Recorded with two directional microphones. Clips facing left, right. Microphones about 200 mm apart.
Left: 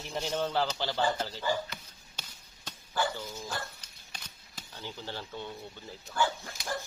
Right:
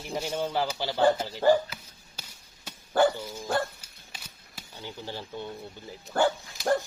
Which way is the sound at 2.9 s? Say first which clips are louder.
Right 10 dB; 60° right (ahead or behind).